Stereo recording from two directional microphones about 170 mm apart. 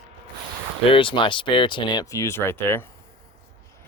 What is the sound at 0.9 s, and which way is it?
Speech, 30° left (ahead or behind).